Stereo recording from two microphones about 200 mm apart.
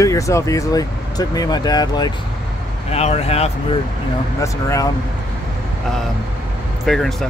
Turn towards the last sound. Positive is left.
turn(degrees=0)  # may be behind; listen again after turning